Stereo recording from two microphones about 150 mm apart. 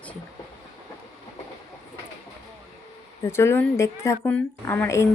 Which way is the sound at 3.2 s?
15° left (ahead or behind).